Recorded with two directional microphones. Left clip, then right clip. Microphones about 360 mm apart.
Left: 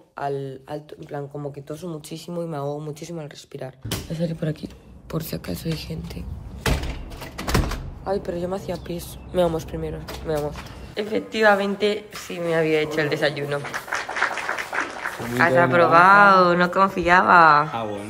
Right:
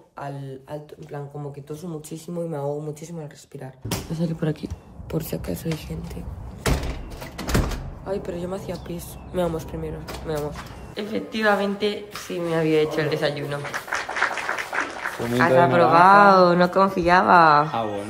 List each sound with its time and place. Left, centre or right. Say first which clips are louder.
0.2 s a woman's voice: left 7 dB; centre
2.2 s a woman's voice: even; centre
4.1 s speech: even; centre
7.3 s door: left 1 dB; centre
8.1 s a woman's voice: left 3 dB; centre